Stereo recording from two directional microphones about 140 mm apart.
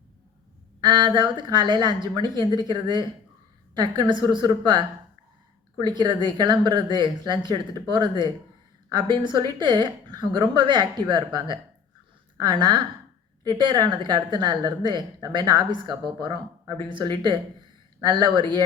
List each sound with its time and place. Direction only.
0.8 s a woman's voice: 30° right (ahead or behind)
5.8 s a woman's voice: 35° right (ahead or behind)